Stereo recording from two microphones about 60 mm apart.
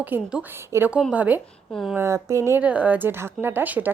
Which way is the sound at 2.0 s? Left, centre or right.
Right.